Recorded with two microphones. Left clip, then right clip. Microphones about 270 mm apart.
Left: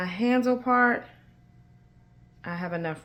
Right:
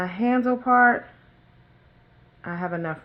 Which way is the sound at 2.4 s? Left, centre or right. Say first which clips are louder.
Right 3 dB; right.